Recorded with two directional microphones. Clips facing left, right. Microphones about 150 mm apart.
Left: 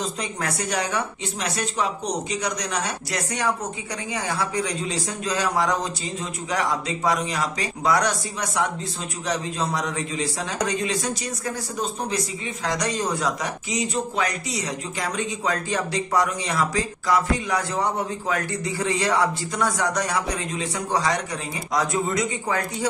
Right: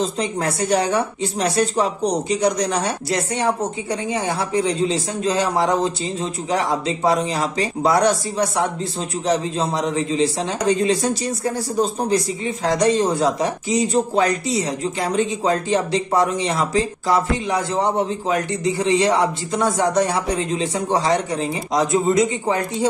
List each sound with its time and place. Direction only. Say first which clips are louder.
0.0 s speech: right 7 dB; 30° right (ahead or behind)